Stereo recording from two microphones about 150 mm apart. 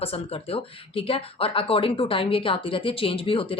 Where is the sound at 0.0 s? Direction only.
40° left (ahead or behind).